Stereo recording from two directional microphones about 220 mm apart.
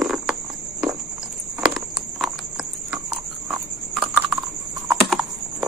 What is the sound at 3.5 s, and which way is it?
Horse, centre (ahead or behind).